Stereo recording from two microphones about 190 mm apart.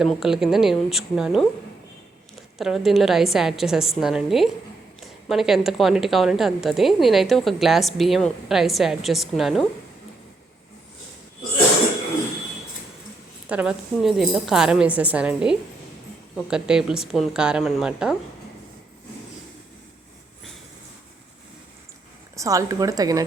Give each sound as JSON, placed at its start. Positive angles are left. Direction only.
{"t": 0.0, "sound": "a woman's voice", "side_deg": 0}
{"t": 2.6, "sound": "a woman's voice", "side_deg": 0}
{"t": 13.5, "sound": "a woman's voice", "side_deg": -5}
{"t": 22.4, "sound": "a woman's voice", "side_deg": -15}